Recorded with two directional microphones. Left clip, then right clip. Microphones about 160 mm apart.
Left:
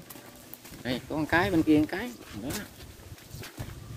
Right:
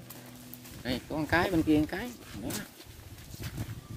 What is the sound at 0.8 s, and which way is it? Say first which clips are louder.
Speech: left 2 dB; 25° right (ahead or behind).